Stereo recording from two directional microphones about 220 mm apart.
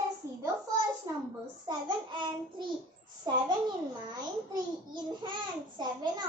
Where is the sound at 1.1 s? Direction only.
15° right (ahead or behind).